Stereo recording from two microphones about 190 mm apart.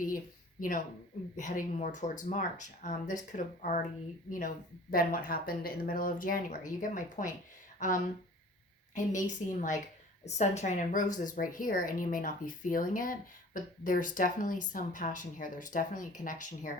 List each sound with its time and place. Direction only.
0.6 s speech: 45° left (ahead or behind)
9.2 s speech: 40° left (ahead or behind)